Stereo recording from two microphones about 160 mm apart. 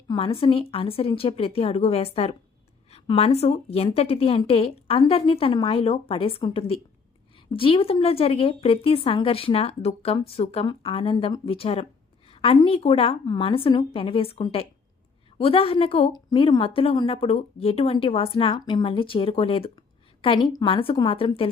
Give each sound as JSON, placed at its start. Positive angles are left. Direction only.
{"t": 0.1, "sound": "a woman's voice", "side_deg": 35}